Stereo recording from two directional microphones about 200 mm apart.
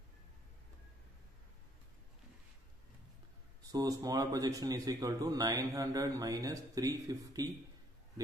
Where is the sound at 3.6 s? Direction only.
20° right (ahead or behind).